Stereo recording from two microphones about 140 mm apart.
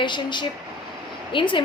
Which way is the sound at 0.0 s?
35° left (ahead or behind).